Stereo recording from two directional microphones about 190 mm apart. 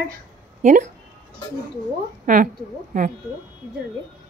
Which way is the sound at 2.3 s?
45° right (ahead or behind).